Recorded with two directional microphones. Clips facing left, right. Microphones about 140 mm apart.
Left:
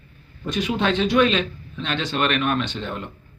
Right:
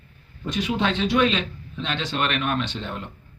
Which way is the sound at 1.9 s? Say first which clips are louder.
Left 3 dB; 25° right (ahead or behind).